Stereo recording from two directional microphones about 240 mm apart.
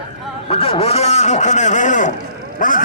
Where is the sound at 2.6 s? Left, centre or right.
Left.